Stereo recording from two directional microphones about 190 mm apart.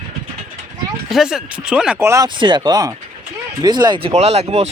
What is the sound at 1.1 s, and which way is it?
Speech, centre (ahead or behind).